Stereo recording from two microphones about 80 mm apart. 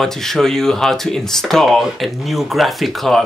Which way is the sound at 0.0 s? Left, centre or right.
Centre.